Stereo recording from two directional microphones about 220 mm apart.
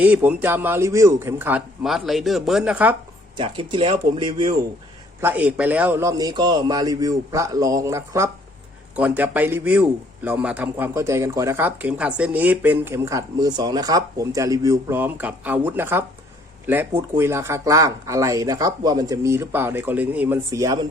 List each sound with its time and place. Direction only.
0.0 s speech: 5° right (ahead or behind)
3.3 s speech: 25° right (ahead or behind)
5.2 s speech: 5° right (ahead or behind)